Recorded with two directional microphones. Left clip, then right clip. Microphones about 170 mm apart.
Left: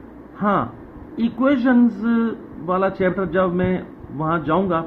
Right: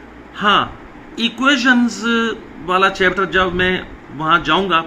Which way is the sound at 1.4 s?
30° left (ahead or behind).